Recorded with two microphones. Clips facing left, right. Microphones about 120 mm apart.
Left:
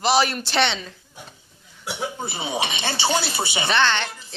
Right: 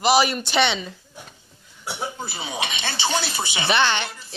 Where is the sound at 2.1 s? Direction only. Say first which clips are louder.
Left 3 dB; 25° left (ahead or behind).